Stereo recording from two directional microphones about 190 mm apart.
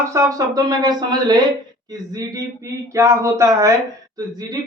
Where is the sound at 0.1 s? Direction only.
15° right (ahead or behind).